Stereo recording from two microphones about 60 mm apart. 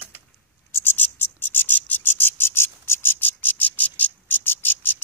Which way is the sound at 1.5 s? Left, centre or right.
Left.